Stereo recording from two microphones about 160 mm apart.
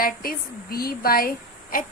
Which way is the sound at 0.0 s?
65° left (ahead or behind).